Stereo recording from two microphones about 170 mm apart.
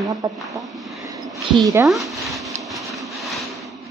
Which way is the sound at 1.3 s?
20° right (ahead or behind).